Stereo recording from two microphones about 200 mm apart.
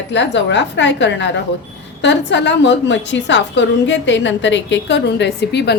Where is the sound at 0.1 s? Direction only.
60° left (ahead or behind).